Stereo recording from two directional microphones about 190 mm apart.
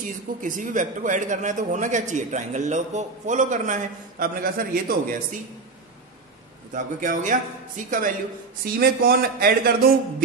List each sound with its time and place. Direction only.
0.0 s speech: 45° right (ahead or behind)
6.7 s a man's voice: 45° right (ahead or behind)